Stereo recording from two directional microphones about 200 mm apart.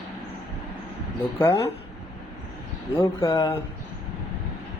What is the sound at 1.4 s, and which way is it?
Speech, 10° left (ahead or behind).